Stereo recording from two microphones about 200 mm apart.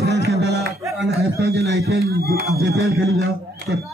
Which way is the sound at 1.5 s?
50° right (ahead or behind).